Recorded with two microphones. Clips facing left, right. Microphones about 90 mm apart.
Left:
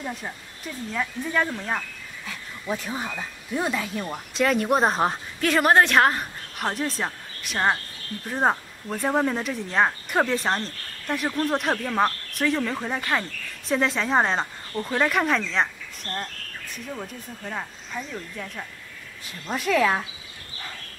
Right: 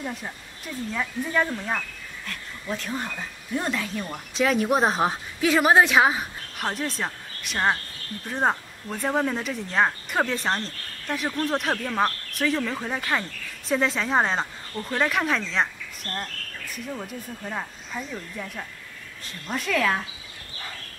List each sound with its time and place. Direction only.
0.0 s speech: 5° left (ahead or behind)